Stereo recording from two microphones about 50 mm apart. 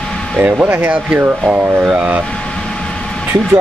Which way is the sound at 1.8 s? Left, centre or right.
Right.